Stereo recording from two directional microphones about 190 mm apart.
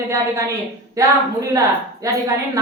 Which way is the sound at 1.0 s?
15° right (ahead or behind).